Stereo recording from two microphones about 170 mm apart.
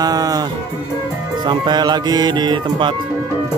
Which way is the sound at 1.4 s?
25° right (ahead or behind).